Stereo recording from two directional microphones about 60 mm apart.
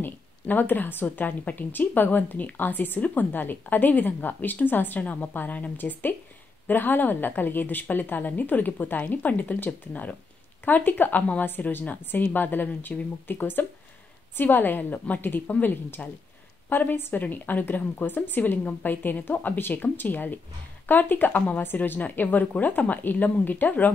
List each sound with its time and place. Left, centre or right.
0.0 s a woman's voice: left